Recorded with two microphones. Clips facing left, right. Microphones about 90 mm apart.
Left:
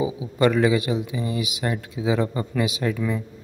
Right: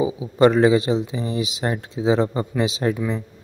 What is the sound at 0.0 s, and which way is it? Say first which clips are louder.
Speech: right 4 dB; 30° right (ahead or behind).